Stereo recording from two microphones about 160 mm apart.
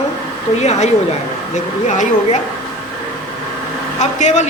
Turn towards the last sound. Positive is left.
turn(degrees=50)  # may be behind; listen again after turning